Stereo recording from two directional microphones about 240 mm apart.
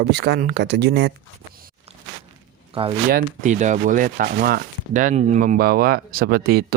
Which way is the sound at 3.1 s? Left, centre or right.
Right.